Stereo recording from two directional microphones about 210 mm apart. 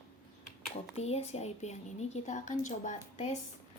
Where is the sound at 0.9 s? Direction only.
30° left (ahead or behind).